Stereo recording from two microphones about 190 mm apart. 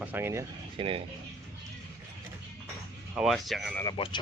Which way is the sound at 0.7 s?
30° right (ahead or behind).